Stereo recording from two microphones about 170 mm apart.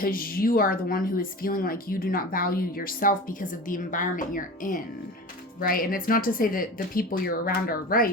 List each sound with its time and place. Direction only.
0.0 s speech: 60° left (ahead or behind)